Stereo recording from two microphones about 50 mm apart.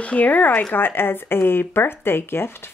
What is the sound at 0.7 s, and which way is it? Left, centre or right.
Speech, left.